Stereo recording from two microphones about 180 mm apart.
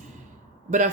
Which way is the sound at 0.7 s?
40° right (ahead or behind).